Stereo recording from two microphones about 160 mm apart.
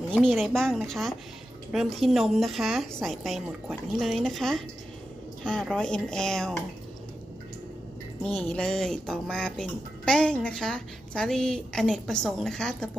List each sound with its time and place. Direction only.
0.1 s speech: 5° left (ahead or behind)
8.4 s speech: 5° left (ahead or behind)